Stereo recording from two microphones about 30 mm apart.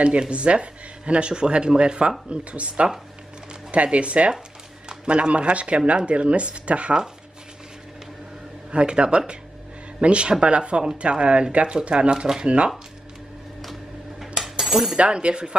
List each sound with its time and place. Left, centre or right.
0.3 s speech: right
4.8 s speech: right
8.7 s speech: right
14.2 s cutlery: centre
15.0 s speech: right